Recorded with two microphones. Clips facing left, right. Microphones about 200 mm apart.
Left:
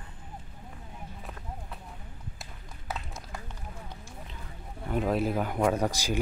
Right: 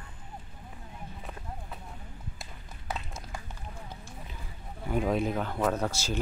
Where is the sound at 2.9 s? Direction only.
5° left (ahead or behind).